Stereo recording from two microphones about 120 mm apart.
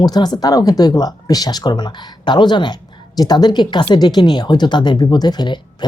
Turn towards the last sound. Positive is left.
turn(degrees=40)  # may be behind; listen again after turning